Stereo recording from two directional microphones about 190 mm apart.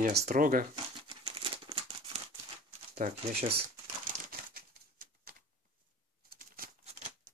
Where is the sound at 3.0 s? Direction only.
45° right (ahead or behind).